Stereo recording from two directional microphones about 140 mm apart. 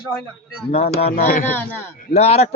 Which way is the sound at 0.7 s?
45° left (ahead or behind).